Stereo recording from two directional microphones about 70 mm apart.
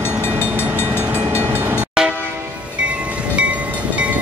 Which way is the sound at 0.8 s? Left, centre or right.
Right.